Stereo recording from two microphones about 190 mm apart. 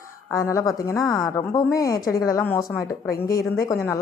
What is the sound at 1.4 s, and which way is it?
Speech, 15° left (ahead or behind).